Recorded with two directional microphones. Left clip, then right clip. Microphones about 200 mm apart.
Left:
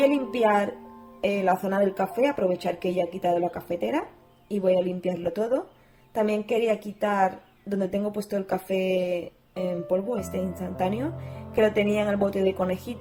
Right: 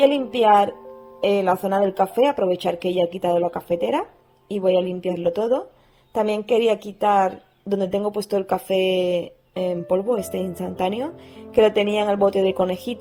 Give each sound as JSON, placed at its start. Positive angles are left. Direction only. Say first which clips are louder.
{"t": 0.0, "sound": "a woman's voice", "louder": "right 5 dB", "side_deg": -40}